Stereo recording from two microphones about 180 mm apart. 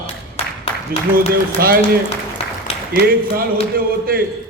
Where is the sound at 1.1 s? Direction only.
55° right (ahead or behind).